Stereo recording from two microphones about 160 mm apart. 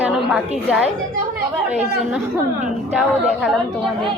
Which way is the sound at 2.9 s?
5° right (ahead or behind).